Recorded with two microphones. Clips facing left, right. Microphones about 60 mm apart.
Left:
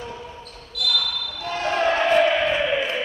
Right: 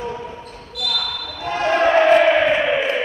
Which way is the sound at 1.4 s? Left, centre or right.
Right.